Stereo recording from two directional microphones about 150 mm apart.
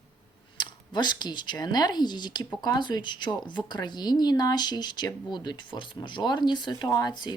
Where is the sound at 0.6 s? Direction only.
30° left (ahead or behind).